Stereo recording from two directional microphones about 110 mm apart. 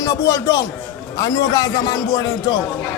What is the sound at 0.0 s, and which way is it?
Speech, 30° left (ahead or behind).